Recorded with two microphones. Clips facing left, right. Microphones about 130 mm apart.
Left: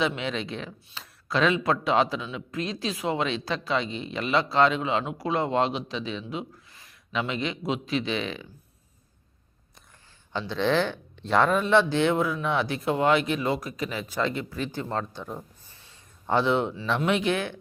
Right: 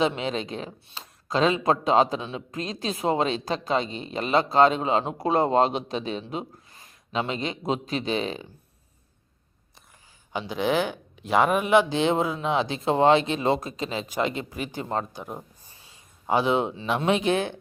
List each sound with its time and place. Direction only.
0.0 s a man's voice: 35° right (ahead or behind)
6.8 s a sound: 30° right (ahead or behind)
7.7 s speech: 40° right (ahead or behind)
10.3 s speech: 15° right (ahead or behind)